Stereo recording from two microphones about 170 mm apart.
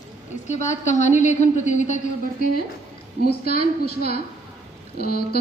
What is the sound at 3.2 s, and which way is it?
A woman's voice, 65° left (ahead or behind).